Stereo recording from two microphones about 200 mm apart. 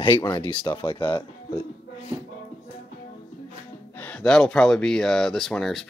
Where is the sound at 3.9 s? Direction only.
5° left (ahead or behind).